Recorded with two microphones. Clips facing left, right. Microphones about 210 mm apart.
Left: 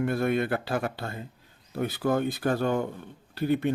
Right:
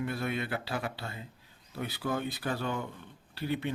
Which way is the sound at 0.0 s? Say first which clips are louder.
Left 8 dB; 50° left (ahead or behind).